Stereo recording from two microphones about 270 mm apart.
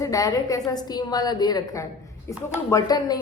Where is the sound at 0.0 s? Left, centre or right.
Centre.